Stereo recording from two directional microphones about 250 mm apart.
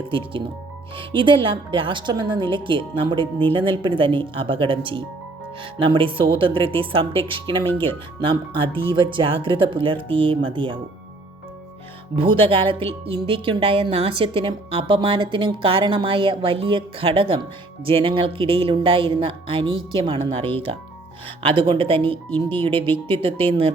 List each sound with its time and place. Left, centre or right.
0.9 s speech: centre
12.1 s speech: right